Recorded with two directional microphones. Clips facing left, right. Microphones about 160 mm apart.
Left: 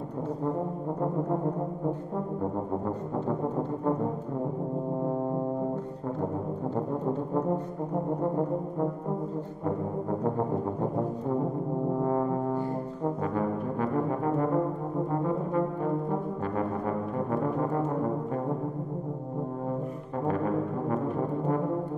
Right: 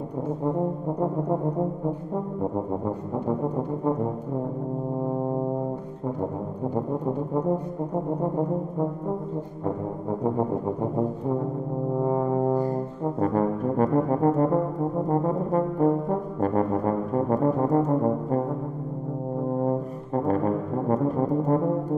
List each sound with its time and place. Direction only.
13.2 s brass instrument: 45° right (ahead or behind)
20.9 s brass instrument: 40° right (ahead or behind)